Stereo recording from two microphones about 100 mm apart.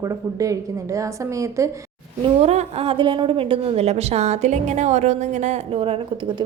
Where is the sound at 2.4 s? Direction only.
90° right.